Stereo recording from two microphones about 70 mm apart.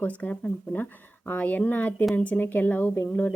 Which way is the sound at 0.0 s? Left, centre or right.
Left.